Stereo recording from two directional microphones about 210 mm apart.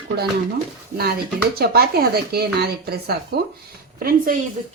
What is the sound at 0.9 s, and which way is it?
Speech, 45° right (ahead or behind).